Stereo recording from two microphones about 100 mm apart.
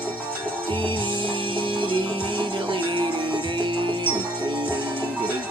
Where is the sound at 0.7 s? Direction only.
55° right (ahead or behind).